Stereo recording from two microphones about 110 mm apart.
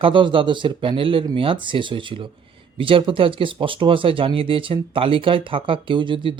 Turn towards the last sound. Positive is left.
turn(degrees=-50)  # may be behind; listen again after turning